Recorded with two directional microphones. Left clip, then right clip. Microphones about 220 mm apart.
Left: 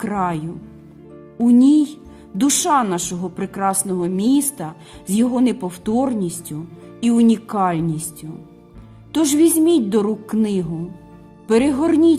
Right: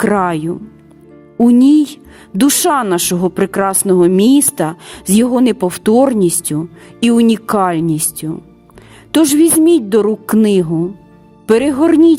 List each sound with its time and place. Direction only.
0.0 s a woman's voice: 45° right (ahead or behind)
9.1 s a woman's voice: 45° right (ahead or behind)